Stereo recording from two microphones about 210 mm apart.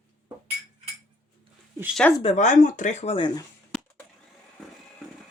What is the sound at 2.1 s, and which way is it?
Speech, 30° left (ahead or behind).